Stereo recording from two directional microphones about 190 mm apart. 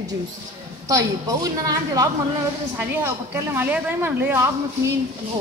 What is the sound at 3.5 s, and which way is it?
A woman's voice, 10° right (ahead or behind).